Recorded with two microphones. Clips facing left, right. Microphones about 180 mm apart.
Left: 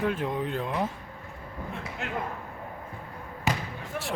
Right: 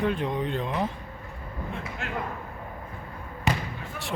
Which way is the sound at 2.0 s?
20° left (ahead or behind).